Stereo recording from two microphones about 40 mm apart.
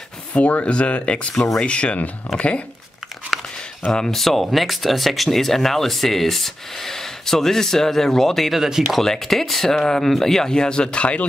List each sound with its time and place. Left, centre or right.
0.3 s speech: left
1.3 s speech: centre
1.6 s speech: left
3.3 s a sound: centre
3.9 s speech: centre
8.5 s speech: centre
9.0 s speech: centre; by 11.2 s left